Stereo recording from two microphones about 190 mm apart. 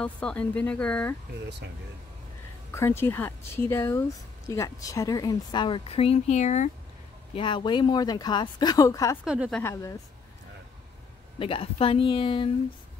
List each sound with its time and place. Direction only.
0.0 s speech: 5° left (ahead or behind)
2.7 s speech: 10° left (ahead or behind); by 6.7 s 40° left (ahead or behind)
7.3 s speech: 25° left (ahead or behind)
9.2 s speech: 5° right (ahead or behind)
9.6 s speech: 15° left (ahead or behind)
11.3 s speech: 30° left (ahead or behind)